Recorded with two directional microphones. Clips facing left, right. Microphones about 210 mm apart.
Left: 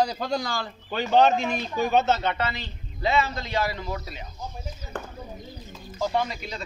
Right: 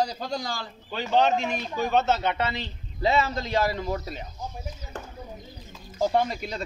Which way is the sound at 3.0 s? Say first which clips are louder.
Right 1 dB; 40° right (ahead or behind).